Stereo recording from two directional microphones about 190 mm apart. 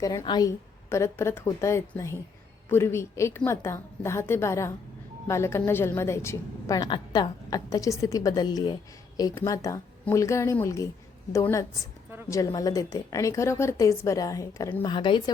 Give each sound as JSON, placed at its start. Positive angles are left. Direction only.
{"t": 0.0, "sound": "a woman's voice", "side_deg": 20}
{"t": 14.8, "sound": "speech", "side_deg": 25}